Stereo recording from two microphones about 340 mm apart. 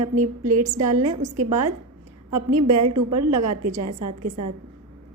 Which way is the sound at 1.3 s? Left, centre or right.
Right.